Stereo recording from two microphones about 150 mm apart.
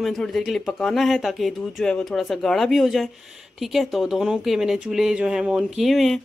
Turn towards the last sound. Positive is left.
turn(degrees=0)  # may be behind; listen again after turning